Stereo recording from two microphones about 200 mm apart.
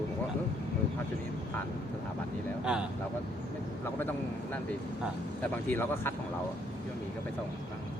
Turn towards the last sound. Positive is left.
turn(degrees=10)  # may be behind; listen again after turning